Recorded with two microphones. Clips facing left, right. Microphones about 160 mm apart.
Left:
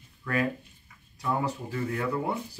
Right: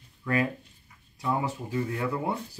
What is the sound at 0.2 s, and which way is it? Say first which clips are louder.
Speech: right 1 dB; 20° right (ahead or behind).